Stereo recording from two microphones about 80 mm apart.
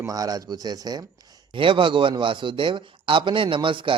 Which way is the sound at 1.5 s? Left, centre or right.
Right.